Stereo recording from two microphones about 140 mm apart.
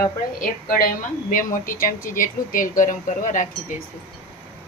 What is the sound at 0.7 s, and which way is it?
Speech, 90° left.